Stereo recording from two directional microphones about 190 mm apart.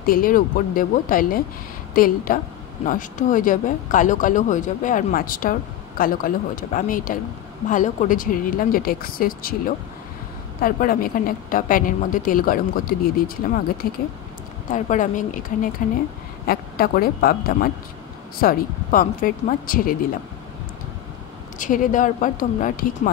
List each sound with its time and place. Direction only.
0.0 s a woman's voice: 50° left (ahead or behind)
10.6 s a woman's voice: 50° left (ahead or behind)
21.5 s a woman's voice: 45° left (ahead or behind)